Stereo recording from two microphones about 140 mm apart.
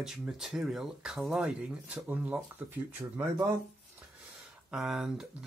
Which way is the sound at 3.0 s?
20° right (ahead or behind).